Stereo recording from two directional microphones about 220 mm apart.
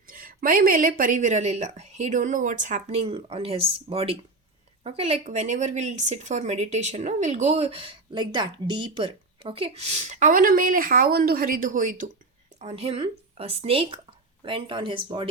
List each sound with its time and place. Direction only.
0.1 s speech: 40° right (ahead or behind); by 15.3 s 20° right (ahead or behind)